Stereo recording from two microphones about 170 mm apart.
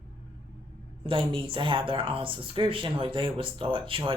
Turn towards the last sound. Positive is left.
turn(degrees=-30)  # may be behind; listen again after turning